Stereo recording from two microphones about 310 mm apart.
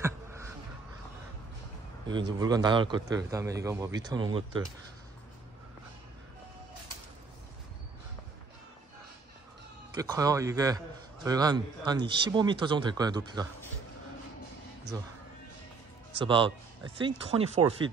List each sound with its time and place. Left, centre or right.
0.0 s a sound: centre
2.3 s speech: centre
9.9 s speech: centre
16.3 s speech: centre